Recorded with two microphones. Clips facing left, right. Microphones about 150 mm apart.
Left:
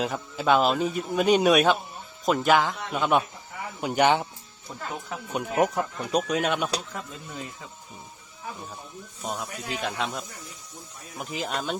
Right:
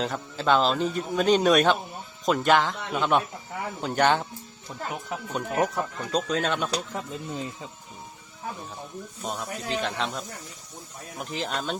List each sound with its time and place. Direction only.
0.0 s speech: 5° left (ahead or behind)
5.3 s speech: 15° left (ahead or behind)
6.9 s speech: 20° right (ahead or behind)
9.2 s speech: 5° left (ahead or behind)